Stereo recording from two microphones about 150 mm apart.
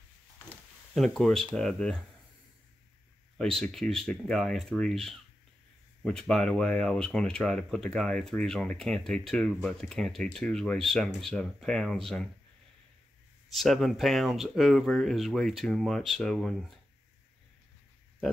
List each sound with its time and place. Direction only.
0.9 s speech: centre (ahead or behind)
3.3 s speech: 5° left (ahead or behind)
13.5 s speech: centre (ahead or behind)